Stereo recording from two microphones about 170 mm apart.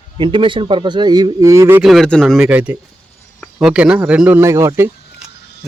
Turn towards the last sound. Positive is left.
turn(degrees=-15)  # may be behind; listen again after turning